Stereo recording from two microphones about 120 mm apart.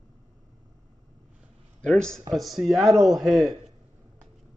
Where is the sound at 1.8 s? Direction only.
5° left (ahead or behind).